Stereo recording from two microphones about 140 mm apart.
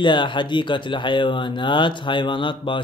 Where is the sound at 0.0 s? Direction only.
35° left (ahead or behind).